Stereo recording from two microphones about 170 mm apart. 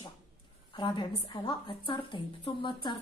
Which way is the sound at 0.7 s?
25° left (ahead or behind).